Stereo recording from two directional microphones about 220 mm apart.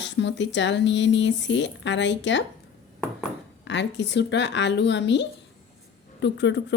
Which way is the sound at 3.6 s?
55° left (ahead or behind).